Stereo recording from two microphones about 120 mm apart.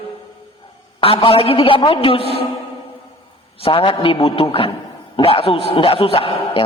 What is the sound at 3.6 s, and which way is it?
A man's voice, 50° left (ahead or behind).